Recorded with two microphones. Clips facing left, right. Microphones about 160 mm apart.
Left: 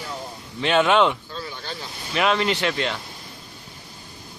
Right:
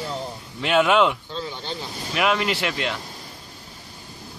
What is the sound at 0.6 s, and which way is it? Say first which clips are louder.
Speech: even; 5° right (ahead or behind).